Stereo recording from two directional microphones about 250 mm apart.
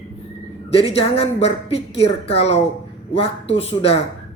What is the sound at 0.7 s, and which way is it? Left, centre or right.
Speech, left.